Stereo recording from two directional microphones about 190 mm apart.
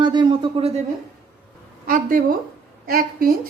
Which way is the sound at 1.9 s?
45° right (ahead or behind).